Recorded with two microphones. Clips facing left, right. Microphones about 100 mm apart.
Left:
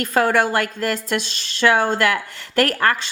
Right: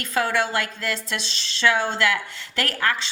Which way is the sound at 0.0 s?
50° left (ahead or behind).